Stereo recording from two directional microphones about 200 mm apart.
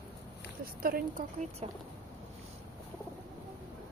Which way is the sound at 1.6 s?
30° right (ahead or behind).